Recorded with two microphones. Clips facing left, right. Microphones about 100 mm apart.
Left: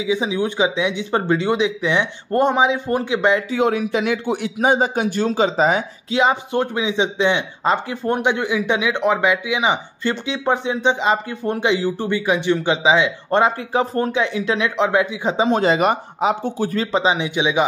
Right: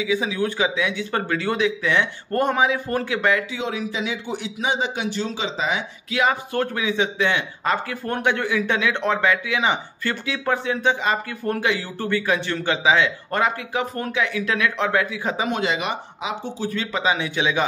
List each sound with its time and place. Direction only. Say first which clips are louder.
0.0 s speech: left 2 dB; 20° left (ahead or behind)
3.4 s speech: left 8 dB; 50° left (ahead or behind)
6.0 s speech: left 3 dB; 25° left (ahead or behind)